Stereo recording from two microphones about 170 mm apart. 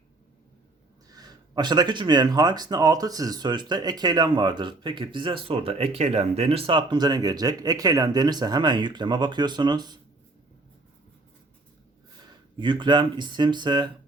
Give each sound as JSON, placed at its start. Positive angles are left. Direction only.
{"t": 1.1, "sound": "speech", "side_deg": -25}
{"t": 12.5, "sound": "speech", "side_deg": -25}